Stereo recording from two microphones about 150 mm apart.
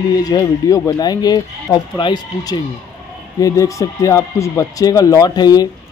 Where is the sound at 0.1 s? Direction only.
25° left (ahead or behind).